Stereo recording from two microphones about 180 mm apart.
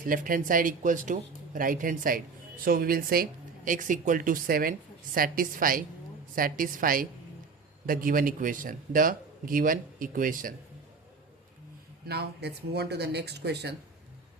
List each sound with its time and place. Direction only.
0.0 s speech: 50° right (ahead or behind)
12.0 s speech: 65° right (ahead or behind)